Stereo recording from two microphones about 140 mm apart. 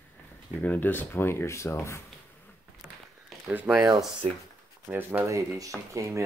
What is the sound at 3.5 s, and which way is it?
Speech, 10° right (ahead or behind).